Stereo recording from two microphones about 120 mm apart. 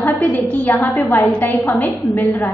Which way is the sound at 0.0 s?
15° left (ahead or behind).